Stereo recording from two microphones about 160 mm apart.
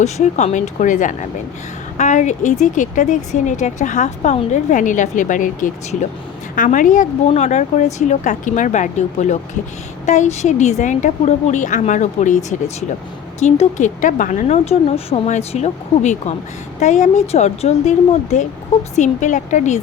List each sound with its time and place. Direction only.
0.0 s a woman's voice: 45° left (ahead or behind)